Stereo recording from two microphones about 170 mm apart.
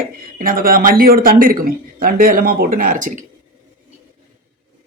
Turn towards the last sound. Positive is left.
turn(degrees=-50)  # may be behind; listen again after turning